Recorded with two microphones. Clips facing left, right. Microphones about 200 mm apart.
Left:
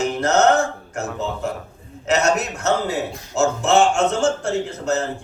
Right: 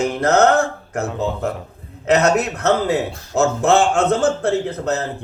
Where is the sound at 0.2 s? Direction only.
60° right (ahead or behind).